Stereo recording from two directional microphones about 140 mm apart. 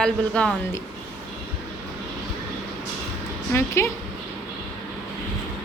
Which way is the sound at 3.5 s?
20° left (ahead or behind).